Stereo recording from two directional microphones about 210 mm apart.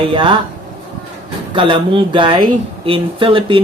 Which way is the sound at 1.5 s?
25° right (ahead or behind).